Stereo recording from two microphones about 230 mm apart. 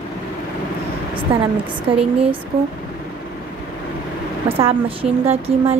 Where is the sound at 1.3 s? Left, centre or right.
Right.